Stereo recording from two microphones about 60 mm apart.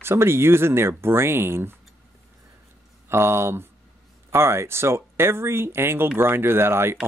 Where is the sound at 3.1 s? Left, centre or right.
Right.